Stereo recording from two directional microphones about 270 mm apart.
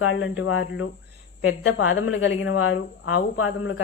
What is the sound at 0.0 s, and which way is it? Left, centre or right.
Speech, left.